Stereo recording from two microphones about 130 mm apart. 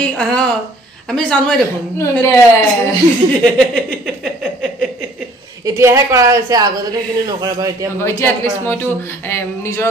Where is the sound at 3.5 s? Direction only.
Centre (ahead or behind).